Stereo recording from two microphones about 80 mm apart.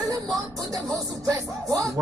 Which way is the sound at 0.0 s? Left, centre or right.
Right.